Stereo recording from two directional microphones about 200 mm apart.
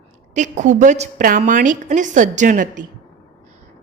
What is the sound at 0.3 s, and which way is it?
A woman's voice, 40° right (ahead or behind).